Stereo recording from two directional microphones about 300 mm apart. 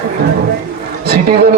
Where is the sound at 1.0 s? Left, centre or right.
Right.